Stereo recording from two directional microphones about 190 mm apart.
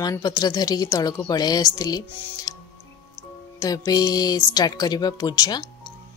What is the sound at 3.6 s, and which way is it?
A woman's voice, 20° left (ahead or behind).